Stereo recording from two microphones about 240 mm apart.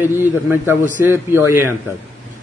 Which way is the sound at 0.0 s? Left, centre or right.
Centre.